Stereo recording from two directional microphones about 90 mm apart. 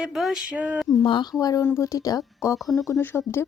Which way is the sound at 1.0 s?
65° left (ahead or behind).